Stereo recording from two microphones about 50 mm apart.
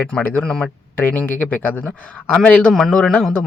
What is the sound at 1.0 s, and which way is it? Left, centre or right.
Speech, left.